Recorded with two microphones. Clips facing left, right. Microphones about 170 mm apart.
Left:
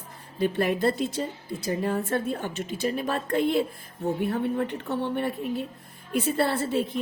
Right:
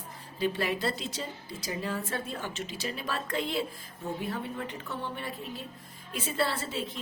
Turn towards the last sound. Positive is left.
turn(degrees=55)  # may be behind; listen again after turning